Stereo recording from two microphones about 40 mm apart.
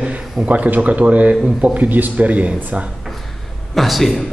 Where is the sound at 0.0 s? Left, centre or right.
Right.